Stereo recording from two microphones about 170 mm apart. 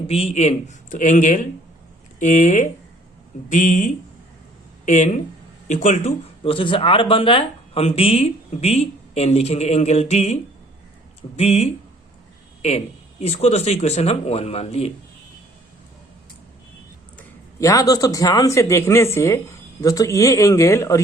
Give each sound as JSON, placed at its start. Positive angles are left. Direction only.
{"t": 0.1, "sound": "a man's voice", "side_deg": 40}
{"t": 5.6, "sound": "speech", "side_deg": 45}
{"t": 11.3, "sound": "speech", "side_deg": 40}
{"t": 17.6, "sound": "speech", "side_deg": 20}